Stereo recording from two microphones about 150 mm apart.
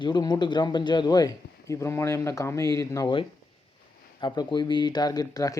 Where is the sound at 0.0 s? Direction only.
30° left (ahead or behind).